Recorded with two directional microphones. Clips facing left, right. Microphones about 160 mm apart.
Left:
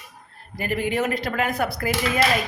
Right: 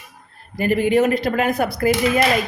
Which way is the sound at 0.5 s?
25° right (ahead or behind).